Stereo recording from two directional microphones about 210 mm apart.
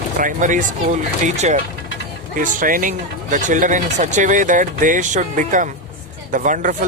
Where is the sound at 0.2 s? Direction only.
40° right (ahead or behind).